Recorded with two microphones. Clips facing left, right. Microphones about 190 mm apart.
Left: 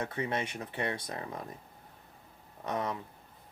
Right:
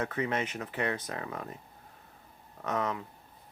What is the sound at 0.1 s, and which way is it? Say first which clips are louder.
Speech: right 2 dB; 30° left (ahead or behind).